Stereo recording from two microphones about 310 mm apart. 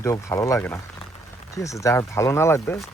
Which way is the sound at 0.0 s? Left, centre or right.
Centre.